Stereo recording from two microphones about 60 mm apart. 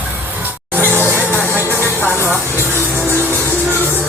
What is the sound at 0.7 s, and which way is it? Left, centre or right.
Music, right.